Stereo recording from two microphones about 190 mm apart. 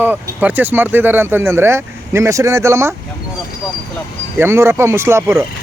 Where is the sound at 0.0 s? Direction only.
10° right (ahead or behind).